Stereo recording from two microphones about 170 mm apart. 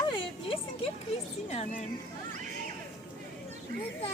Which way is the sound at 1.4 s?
40° left (ahead or behind).